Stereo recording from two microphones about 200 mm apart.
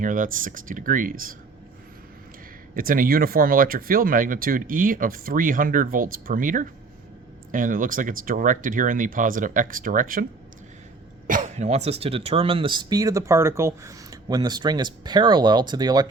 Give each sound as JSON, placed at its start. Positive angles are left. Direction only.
{"t": 0.0, "sound": "speech", "side_deg": -40}
{"t": 2.7, "sound": "speech", "side_deg": -45}
{"t": 11.3, "sound": "speech", "side_deg": -40}